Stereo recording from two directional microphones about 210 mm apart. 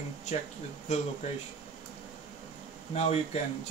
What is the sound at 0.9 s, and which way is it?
Speech, 35° left (ahead or behind).